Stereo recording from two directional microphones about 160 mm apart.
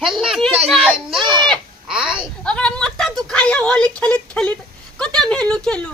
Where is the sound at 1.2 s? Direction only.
30° right (ahead or behind).